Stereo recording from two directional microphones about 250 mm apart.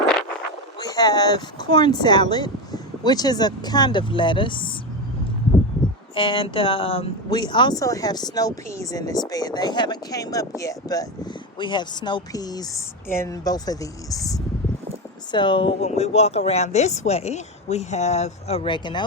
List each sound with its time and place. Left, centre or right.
0.8 s speech: centre
6.1 s speech: centre